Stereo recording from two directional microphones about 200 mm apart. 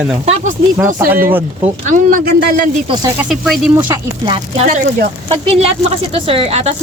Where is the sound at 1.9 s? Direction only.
40° right (ahead or behind).